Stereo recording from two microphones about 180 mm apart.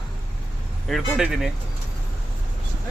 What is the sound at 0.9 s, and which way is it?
Speech, 5° right (ahead or behind).